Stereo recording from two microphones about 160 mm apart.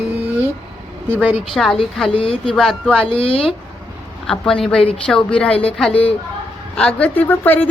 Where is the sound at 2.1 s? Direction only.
35° left (ahead or behind).